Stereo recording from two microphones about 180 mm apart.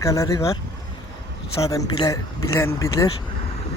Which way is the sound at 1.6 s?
20° left (ahead or behind).